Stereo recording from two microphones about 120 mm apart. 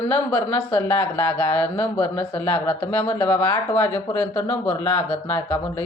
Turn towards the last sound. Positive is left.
turn(degrees=20)  # may be behind; listen again after turning